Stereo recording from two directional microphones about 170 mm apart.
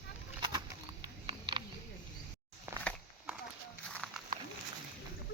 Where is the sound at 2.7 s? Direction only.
15° right (ahead or behind).